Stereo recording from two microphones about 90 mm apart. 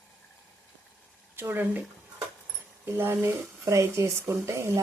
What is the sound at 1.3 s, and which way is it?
Speech, 25° right (ahead or behind).